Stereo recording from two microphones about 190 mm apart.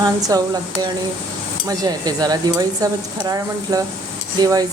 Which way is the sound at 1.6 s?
20° right (ahead or behind).